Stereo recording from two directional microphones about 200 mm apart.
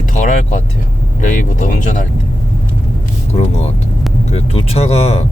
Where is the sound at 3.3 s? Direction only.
30° left (ahead or behind).